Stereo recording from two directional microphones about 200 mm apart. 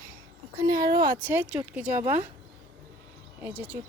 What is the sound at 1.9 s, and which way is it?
Speech, 40° right (ahead or behind).